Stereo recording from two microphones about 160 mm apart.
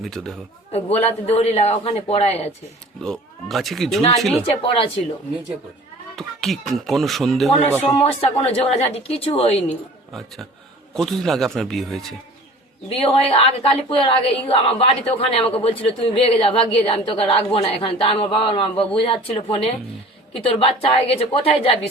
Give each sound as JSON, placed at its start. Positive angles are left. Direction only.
{"t": 0.0, "sound": "speech", "side_deg": 0}
{"t": 0.7, "sound": "a woman's voice", "side_deg": 40}
{"t": 3.0, "sound": "speech", "side_deg": 0}
{"t": 4.4, "sound": "a woman's voice", "side_deg": 35}
{"t": 6.1, "sound": "speech", "side_deg": 0}
{"t": 7.9, "sound": "a woman's voice", "side_deg": 40}
{"t": 10.9, "sound": "speech", "side_deg": 0}
{"t": 12.9, "sound": "a woman's voice", "side_deg": 40}